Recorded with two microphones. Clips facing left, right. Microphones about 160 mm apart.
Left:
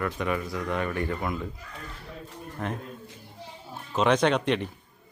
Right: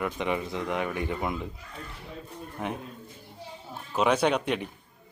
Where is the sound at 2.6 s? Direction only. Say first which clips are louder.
Even; 15° right (ahead or behind).